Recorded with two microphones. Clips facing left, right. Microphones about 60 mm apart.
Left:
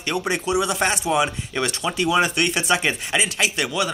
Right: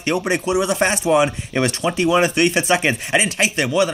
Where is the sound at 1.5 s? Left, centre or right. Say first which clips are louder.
Right 5 dB; right.